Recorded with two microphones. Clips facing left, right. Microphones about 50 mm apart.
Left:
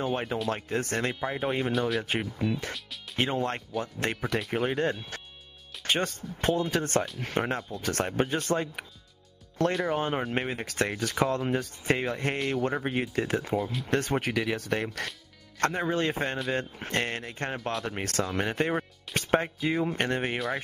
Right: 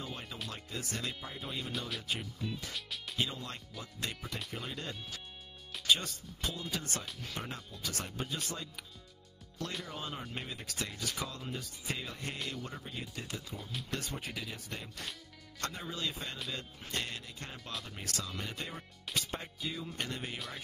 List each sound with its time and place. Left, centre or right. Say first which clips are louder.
0.0 s speech: left 14 dB; left
12.4 s a man's voice: left 12 dB; left
12.6 s speech: left 15 dB; left
15.6 s speech: left 12 dB; left
19.1 s speech: left 13 dB; left